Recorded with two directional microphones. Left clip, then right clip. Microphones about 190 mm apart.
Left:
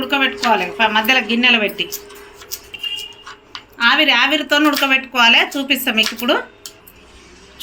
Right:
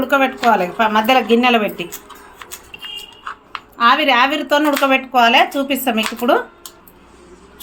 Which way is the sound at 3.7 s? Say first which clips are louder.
Right 1 dB; 45° right (ahead or behind).